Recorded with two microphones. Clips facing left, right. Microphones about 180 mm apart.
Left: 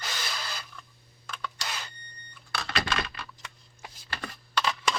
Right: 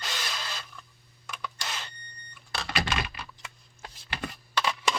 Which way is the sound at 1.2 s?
10° right (ahead or behind).